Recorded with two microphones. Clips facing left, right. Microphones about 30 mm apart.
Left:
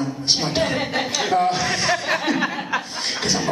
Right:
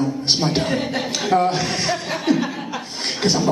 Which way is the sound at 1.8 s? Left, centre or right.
Centre.